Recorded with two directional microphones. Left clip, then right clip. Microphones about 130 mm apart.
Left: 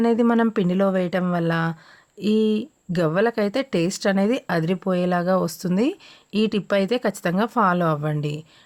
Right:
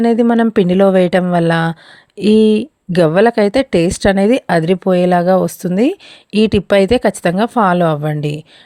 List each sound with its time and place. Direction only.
0.0 s speech: 45° right (ahead or behind)